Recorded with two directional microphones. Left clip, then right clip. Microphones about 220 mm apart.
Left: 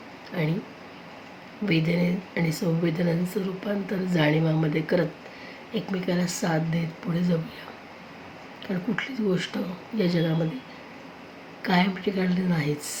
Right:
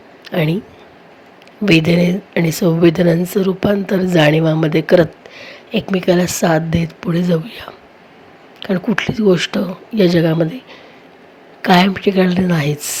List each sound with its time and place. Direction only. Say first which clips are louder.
0.3 s speech: right 12 dB; 45° right (ahead or behind)
1.6 s speech: right 13 dB; 45° right (ahead or behind)
11.6 s speech: right 13 dB; 40° right (ahead or behind)